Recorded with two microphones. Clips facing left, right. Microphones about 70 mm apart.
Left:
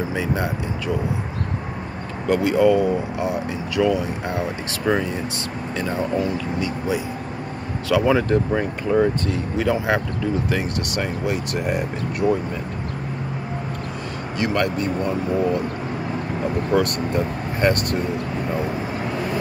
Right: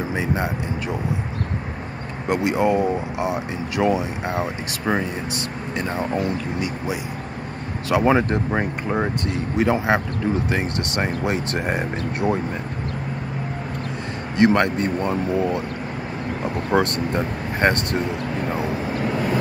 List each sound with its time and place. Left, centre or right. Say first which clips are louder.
0.1 s speech: even; right
2.2 s speech: left 3 dB; right
4.9 s speech: left 2 dB; centre
7.9 s speech: even; right
14.4 s speech: right 5 dB; right
16.7 s speech: right 1 dB; right